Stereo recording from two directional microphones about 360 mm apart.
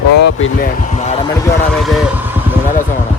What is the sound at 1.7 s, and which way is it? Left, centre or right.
Speech, centre.